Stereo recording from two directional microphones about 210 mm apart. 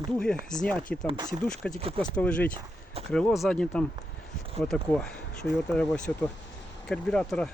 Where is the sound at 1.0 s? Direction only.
20° right (ahead or behind).